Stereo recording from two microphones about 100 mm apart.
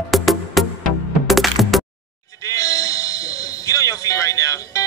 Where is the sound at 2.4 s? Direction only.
35° left (ahead or behind).